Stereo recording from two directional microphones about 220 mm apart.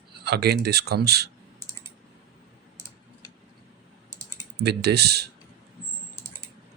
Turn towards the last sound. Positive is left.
turn(degrees=-50)  # may be behind; listen again after turning